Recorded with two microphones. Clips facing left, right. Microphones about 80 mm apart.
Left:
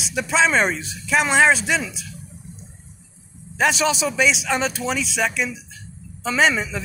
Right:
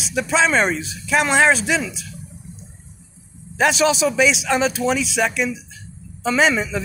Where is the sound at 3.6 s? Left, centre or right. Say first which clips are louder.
Right 3 dB; centre.